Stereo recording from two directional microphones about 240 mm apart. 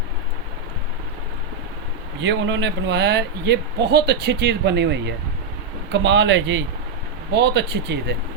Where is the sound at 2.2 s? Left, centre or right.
Right.